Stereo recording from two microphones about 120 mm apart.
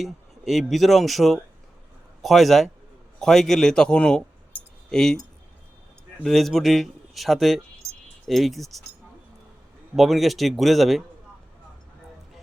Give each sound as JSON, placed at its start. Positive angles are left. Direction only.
{"t": 0.0, "sound": "speech", "side_deg": 0}
{"t": 6.2, "sound": "speech", "side_deg": 0}
{"t": 9.9, "sound": "speech", "side_deg": 0}